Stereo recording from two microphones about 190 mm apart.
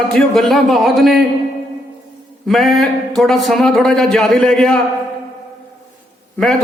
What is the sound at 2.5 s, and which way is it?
A man's voice, centre (ahead or behind).